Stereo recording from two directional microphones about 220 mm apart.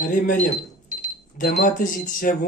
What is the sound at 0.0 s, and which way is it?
Speech, 35° left (ahead or behind).